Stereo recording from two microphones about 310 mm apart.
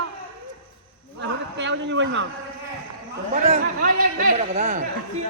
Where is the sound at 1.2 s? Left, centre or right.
Right.